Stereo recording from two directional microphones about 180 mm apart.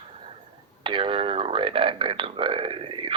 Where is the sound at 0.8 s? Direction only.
30° right (ahead or behind).